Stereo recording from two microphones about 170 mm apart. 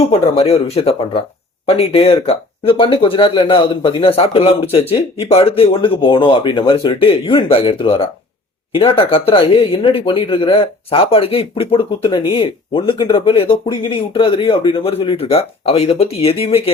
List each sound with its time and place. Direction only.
0.1 s speech: 35° left (ahead or behind)